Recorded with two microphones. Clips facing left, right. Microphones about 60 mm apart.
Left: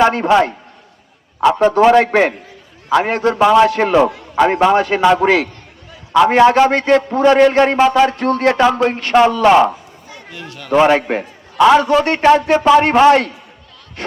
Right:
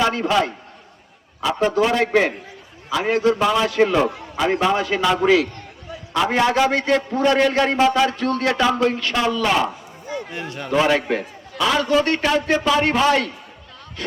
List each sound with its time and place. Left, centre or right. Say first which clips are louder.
0.0 s a man's voice: left 7 dB; left
1.4 s a man's voice: left 7 dB; left
3.4 s a man's voice: left 9 dB; left
3.7 s a man's voice: left 4 dB; left
7.3 s a man's voice: left 7 dB; left
10.3 s a man's voice: right 3 dB; right
10.8 s a man's voice: left 6 dB; left